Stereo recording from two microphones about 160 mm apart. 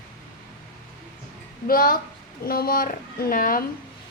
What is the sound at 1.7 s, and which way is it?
A woman's voice, 65° left (ahead or behind).